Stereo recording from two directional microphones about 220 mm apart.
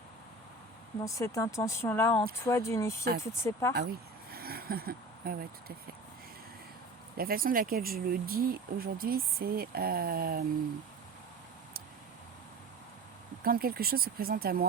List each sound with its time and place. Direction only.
1.0 s speech: 15° left (ahead or behind)
4.3 s vehicle: 45° right (ahead or behind)
7.2 s speech: 40° right (ahead or behind)
13.4 s speech: 40° right (ahead or behind)